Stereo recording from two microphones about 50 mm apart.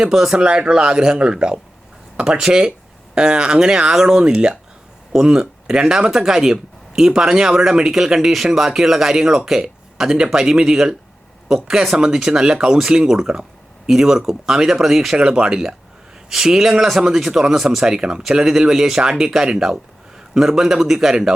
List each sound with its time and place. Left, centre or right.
0.1 s speech: centre